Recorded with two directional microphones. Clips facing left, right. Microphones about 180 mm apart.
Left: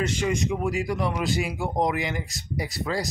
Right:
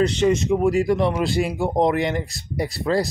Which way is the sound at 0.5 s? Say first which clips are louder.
Right 8 dB; 30° right (ahead or behind).